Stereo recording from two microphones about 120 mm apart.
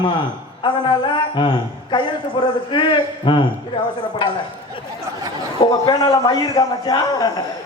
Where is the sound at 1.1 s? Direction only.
40° left (ahead or behind).